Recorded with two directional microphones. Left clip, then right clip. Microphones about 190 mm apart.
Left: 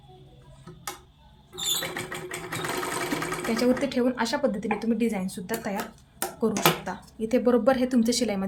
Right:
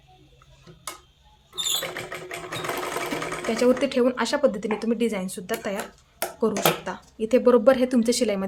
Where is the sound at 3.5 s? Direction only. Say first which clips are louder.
Right 5 dB; 20° right (ahead or behind).